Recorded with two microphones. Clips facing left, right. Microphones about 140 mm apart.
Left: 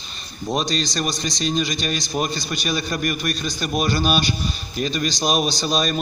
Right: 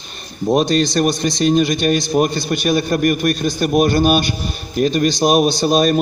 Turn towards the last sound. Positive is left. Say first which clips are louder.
# right 8 dB
turn(degrees=-55)  # may be behind; listen again after turning